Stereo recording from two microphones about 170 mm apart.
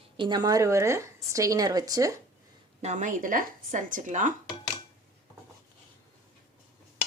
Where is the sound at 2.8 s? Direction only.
45° right (ahead or behind).